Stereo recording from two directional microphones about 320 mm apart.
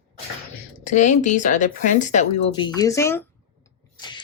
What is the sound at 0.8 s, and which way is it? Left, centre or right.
Speech, left.